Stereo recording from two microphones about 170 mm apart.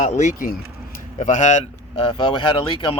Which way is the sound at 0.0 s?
45° left (ahead or behind).